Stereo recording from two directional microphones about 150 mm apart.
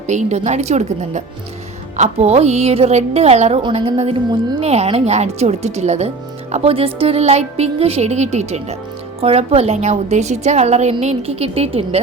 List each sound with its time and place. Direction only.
0.1 s a woman's voice: 50° right (ahead or behind)